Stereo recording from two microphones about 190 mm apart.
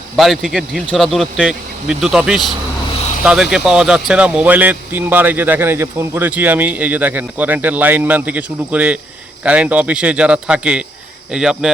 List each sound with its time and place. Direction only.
0.2 s speech: centre (ahead or behind)